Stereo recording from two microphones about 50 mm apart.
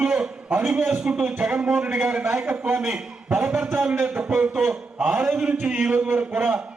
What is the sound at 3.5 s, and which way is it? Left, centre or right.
A man's voice, centre.